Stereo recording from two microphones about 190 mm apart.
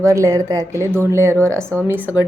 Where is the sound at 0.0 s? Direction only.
15° right (ahead or behind).